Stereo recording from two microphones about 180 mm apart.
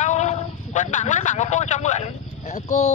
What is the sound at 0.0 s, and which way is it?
Speech, 40° left (ahead or behind).